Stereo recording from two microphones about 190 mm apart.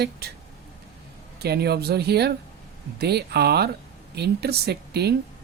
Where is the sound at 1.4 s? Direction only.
60° right (ahead or behind).